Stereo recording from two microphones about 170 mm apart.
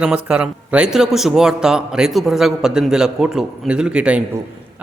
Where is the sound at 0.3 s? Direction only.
5° right (ahead or behind).